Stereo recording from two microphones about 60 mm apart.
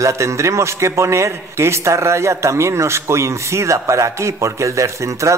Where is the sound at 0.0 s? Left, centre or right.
Right.